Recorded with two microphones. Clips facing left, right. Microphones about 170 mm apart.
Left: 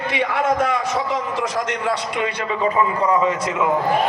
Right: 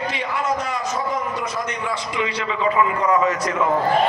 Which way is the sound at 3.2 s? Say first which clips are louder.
Left 1 dB; 25° left (ahead or behind).